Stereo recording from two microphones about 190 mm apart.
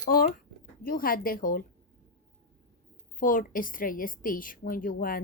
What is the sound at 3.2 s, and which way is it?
A woman's voice, 45° left (ahead or behind).